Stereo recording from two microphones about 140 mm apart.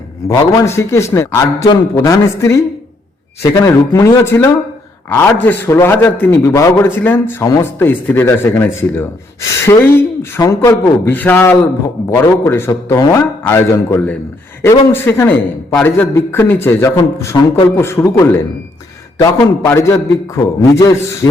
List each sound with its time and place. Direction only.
0.3 s a man's voice: 20° left (ahead or behind)
19.6 s a man's voice: 20° left (ahead or behind)